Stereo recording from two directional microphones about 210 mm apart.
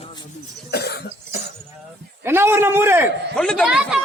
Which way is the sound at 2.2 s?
10° right (ahead or behind).